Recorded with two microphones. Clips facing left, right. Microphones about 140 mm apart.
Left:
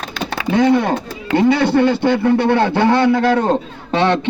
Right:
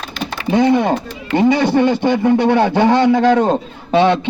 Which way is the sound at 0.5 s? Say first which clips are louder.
Right 1 dB; 15° right (ahead or behind).